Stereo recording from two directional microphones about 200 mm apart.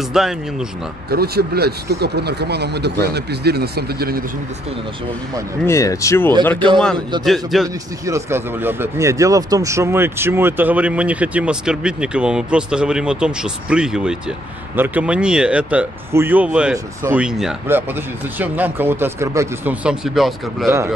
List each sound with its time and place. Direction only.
0.2 s speech: centre (ahead or behind)
1.1 s speech: 50° right (ahead or behind)
5.7 s speech: 15° left (ahead or behind)
7.2 s speech: centre (ahead or behind)
7.6 s speech: 15° right (ahead or behind)